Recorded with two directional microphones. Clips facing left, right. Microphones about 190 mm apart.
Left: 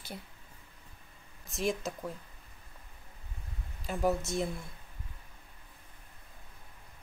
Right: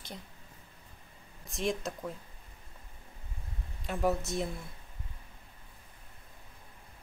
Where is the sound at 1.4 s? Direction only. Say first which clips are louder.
Even; centre (ahead or behind).